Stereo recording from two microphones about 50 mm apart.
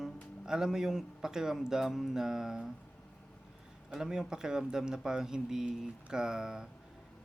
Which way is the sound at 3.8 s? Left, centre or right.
Centre.